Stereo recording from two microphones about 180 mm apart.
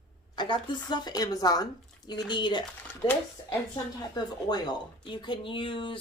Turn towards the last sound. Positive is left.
turn(degrees=30)  # may be behind; listen again after turning